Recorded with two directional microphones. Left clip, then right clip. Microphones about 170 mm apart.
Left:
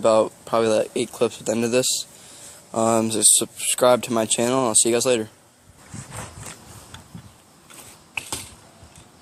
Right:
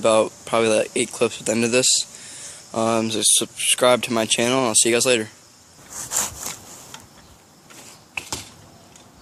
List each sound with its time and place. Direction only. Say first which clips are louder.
0.0 s speech: even; 10° left (ahead or behind)
6.5 s rub: right 6 dB; 35° right (ahead or behind)
8.2 s computer keyboard: even; 10° left (ahead or behind)